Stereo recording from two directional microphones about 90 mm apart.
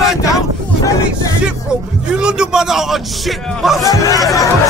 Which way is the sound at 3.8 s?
40° left (ahead or behind).